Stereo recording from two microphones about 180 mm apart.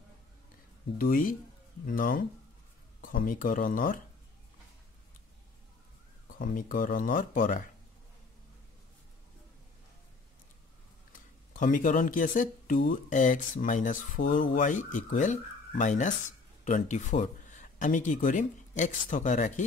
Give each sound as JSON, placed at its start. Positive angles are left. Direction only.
{"t": 0.9, "sound": "speech", "side_deg": 50}
{"t": 6.2, "sound": "speech", "side_deg": 50}
{"t": 11.1, "sound": "speech", "side_deg": 45}